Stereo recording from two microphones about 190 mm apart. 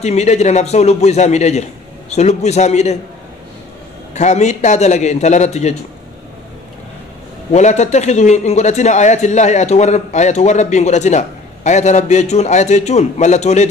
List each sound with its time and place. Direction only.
0.0 s a man's voice: 35° left (ahead or behind)
4.1 s a man's voice: 35° left (ahead or behind)
7.5 s a man's voice: 40° left (ahead or behind)